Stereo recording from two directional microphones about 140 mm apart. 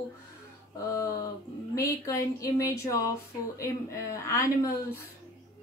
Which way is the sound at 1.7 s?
20° left (ahead or behind).